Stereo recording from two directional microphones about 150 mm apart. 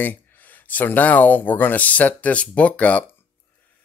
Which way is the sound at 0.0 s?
10° left (ahead or behind).